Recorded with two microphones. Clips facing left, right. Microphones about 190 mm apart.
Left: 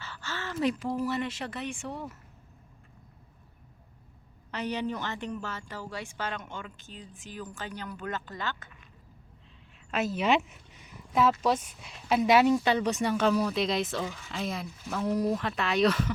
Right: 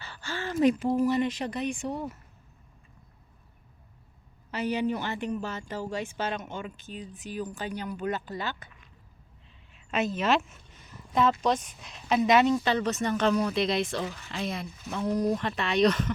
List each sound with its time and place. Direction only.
0.0 s speech: 15° right (ahead or behind)
4.5 s speech: 10° right (ahead or behind)
9.7 s a sound: centre (ahead or behind)
10.2 s speech: 15° left (ahead or behind)